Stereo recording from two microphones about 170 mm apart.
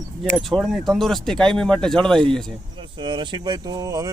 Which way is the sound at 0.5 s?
Centre (ahead or behind).